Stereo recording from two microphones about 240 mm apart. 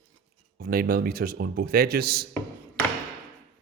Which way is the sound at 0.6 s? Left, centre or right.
Right.